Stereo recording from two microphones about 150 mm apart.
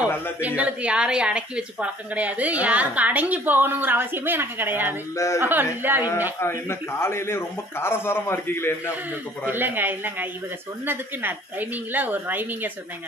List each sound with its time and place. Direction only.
0.4 s a woman's voice: 10° right (ahead or behind)
5.1 s a woman's voice: 20° left (ahead or behind)
5.4 s a woman's voice: 15° right (ahead or behind)
6.4 s a man's voice: 15° left (ahead or behind)
9.5 s a woman's voice: 15° right (ahead or behind)
11.9 s a woman's voice: 10° right (ahead or behind)